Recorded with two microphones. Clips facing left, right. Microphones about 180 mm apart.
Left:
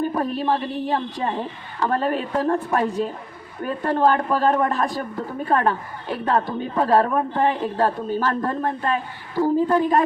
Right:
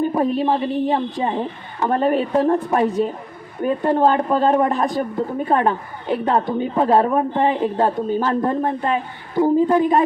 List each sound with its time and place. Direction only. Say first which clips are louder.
0.0 s a woman's voice: right 4 dB; 20° right (ahead or behind)